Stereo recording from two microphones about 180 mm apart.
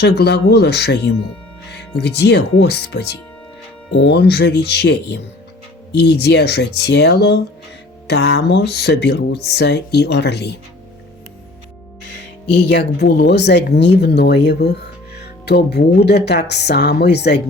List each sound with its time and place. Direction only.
0.0 s speech: 70° left (ahead or behind)
12.0 s speech: 70° left (ahead or behind)